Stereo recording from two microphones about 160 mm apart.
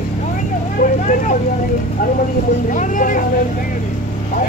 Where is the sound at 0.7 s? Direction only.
50° left (ahead or behind).